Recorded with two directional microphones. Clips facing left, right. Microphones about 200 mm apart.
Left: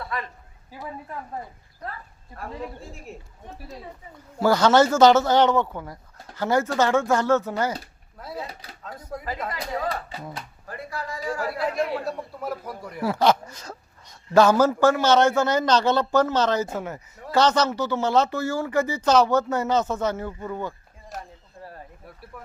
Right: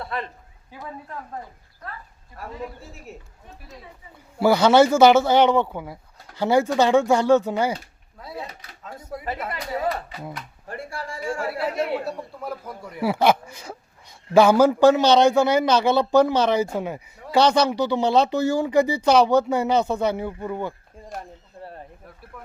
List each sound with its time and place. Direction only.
0.0 s a sound: 30° right (ahead or behind)
3.1 s speech: centre (ahead or behind)
4.4 s speech: 10° right (ahead or behind)
8.2 s speech: centre (ahead or behind)
10.7 s speech: 30° right (ahead or behind)
12.0 s speech: centre (ahead or behind)
22.3 s speech: 5° left (ahead or behind)